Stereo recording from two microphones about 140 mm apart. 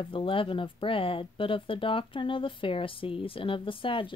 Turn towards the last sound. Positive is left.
turn(degrees=40)  # may be behind; listen again after turning